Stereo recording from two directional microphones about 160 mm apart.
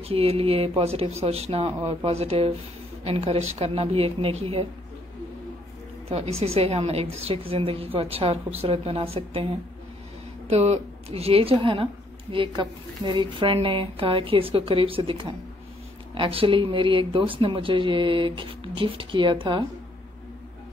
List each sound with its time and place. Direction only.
0.0 s speech: 40° right (ahead or behind)
6.0 s speech: 40° right (ahead or behind)
10.5 s speech: 40° right (ahead or behind)